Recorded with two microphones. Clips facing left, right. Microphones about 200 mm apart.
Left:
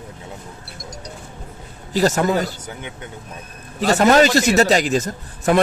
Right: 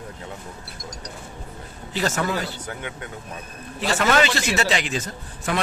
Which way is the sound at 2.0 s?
40° left (ahead or behind).